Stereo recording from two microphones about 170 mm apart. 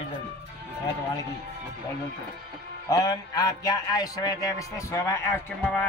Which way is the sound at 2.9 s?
25° left (ahead or behind).